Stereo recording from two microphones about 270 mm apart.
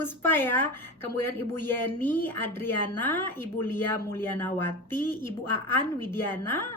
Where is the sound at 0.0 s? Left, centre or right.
Centre.